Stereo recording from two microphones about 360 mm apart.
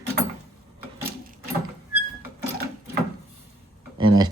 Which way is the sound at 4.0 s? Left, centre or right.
Centre.